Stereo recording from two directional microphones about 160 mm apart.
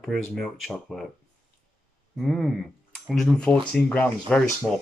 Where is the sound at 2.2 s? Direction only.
Centre (ahead or behind).